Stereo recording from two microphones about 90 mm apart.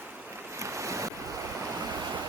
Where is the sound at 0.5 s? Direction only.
35° right (ahead or behind).